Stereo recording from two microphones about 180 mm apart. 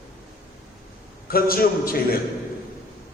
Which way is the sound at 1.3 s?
55° left (ahead or behind).